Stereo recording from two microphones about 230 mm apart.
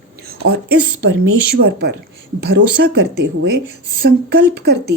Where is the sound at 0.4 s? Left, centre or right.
Right.